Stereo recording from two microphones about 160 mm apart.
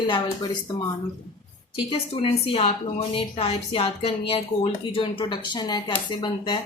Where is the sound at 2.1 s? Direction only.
40° left (ahead or behind).